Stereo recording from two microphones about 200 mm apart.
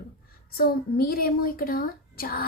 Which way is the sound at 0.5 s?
50° left (ahead or behind).